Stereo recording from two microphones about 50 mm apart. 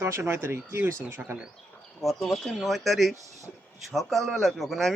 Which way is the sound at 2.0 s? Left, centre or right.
Centre.